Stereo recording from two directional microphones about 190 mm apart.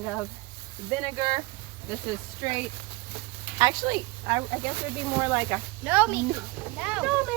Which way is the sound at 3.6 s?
20° right (ahead or behind).